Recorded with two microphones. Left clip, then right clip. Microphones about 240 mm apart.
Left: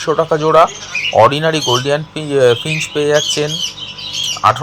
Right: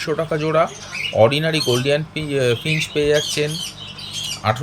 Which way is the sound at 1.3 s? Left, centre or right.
Centre.